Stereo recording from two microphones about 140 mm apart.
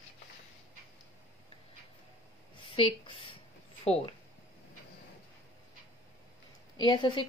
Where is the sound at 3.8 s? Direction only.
45° left (ahead or behind).